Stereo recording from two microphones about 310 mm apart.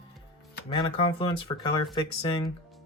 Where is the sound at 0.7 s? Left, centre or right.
Centre.